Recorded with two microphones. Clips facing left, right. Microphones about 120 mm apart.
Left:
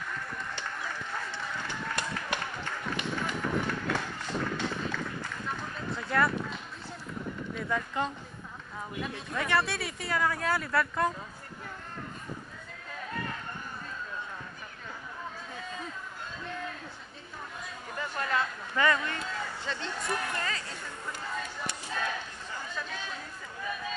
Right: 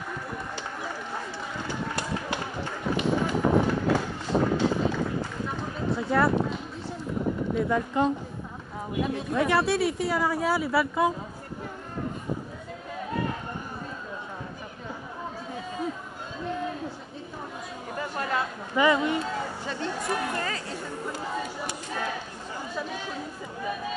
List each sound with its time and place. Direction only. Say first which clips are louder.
0.1 s run: right 6 dB; 20° right (ahead or behind)
4.3 s run: right 10 dB; 40° right (ahead or behind)
4.6 s run: right 9 dB; 25° right (ahead or behind)
5.9 s a sound: right 4 dB; 5° right (ahead or behind)
7.5 s speech: right 6 dB; 10° right (ahead or behind)
17.9 s a sound: right 2 dB; 25° right (ahead or behind)
19.6 s chatter: right 5 dB; 10° right (ahead or behind)
20.2 s a sound: right 4 dB; 20° right (ahead or behind)
22.8 s chatter: right 7 dB; 15° right (ahead or behind)